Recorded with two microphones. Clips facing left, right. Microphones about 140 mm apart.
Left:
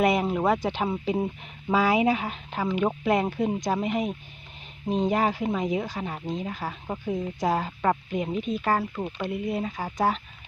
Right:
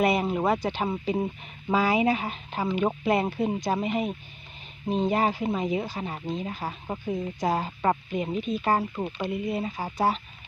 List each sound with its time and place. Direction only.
0.0 s speech: centre (ahead or behind)
2.5 s speech: 10° right (ahead or behind)
8.6 s speech: 15° right (ahead or behind)